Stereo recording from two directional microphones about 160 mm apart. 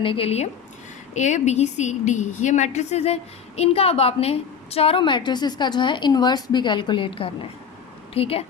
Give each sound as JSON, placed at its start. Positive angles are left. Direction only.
{"t": 0.0, "sound": "a woman's voice", "side_deg": 35}